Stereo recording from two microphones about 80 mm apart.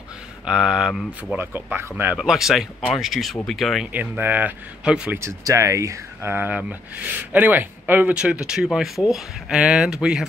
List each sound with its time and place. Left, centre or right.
0.5 s speech: centre
1.3 s speech: right
2.1 s speech: centre
3.9 s speech: right
5.2 s speech: right
6.3 s speech: right
8.1 s speech: centre